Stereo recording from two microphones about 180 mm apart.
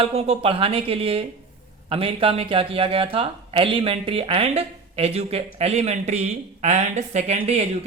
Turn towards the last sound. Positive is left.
turn(degrees=-35)  # may be behind; listen again after turning